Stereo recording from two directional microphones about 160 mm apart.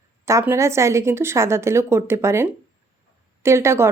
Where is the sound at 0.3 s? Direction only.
20° right (ahead or behind).